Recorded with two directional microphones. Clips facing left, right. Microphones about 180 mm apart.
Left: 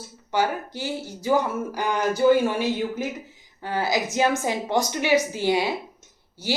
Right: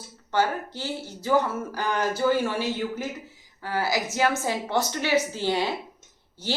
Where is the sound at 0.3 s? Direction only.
10° left (ahead or behind).